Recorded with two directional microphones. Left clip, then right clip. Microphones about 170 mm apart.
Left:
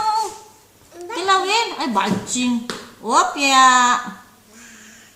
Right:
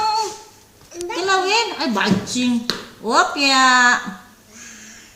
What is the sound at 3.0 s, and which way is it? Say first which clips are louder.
Speech: even; 5° left (ahead or behind).